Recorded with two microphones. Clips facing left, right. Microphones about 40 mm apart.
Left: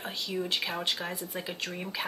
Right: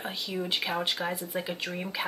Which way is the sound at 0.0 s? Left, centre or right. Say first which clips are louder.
Even; centre.